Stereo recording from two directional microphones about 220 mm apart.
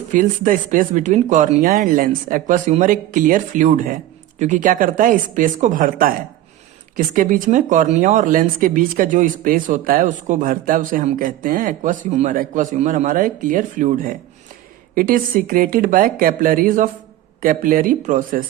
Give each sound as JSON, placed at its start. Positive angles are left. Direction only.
{"t": 0.1, "sound": "speech", "side_deg": -35}